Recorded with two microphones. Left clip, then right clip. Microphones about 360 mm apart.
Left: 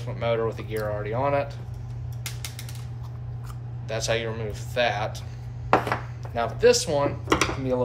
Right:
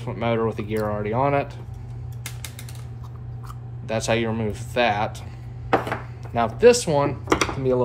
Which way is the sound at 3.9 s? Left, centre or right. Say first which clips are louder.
Right 4 dB; centre.